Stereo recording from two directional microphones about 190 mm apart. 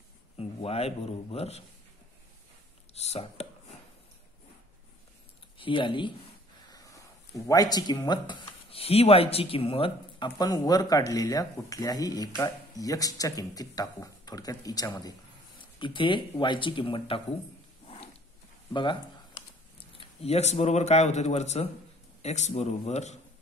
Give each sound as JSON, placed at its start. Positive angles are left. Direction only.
{"t": 0.4, "sound": "a man's voice", "side_deg": 30}
{"t": 2.9, "sound": "speech", "side_deg": 35}
{"t": 5.6, "sound": "speech", "side_deg": 25}
{"t": 17.8, "sound": "a sound", "side_deg": 30}
{"t": 18.7, "sound": "speech", "side_deg": 25}
{"t": 20.0, "sound": "a man's voice", "side_deg": 35}